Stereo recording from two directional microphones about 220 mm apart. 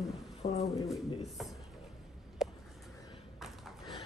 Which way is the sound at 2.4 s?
Centre (ahead or behind).